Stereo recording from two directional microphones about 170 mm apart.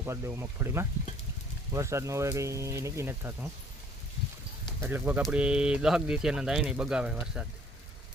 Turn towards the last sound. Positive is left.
turn(degrees=-5)  # may be behind; listen again after turning